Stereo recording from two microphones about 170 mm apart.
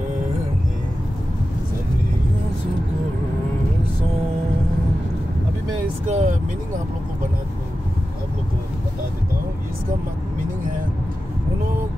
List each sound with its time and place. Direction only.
6.0 s vehicle: 45° right (ahead or behind)